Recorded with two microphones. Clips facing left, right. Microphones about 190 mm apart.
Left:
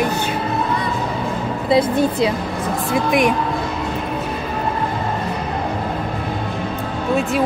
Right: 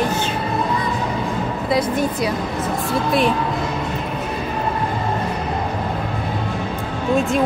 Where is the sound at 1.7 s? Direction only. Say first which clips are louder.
Left 4 dB; 30° left (ahead or behind).